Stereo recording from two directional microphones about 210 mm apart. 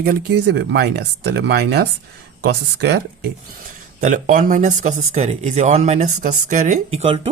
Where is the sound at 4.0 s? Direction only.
35° right (ahead or behind).